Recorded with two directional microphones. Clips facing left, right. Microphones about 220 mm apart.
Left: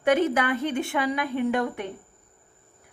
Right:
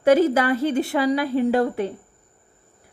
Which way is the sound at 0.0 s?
40° right (ahead or behind).